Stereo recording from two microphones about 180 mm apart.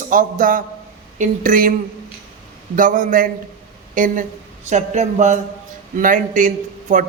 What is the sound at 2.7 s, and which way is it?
A man's voice, 45° right (ahead or behind).